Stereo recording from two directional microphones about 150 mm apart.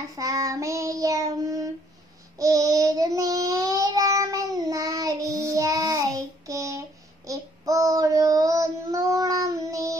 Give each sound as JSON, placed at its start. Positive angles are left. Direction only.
{"t": 0.1, "sound": "child singing", "side_deg": -25}